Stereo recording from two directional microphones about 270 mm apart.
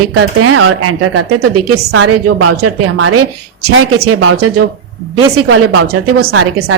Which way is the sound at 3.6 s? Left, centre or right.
Right.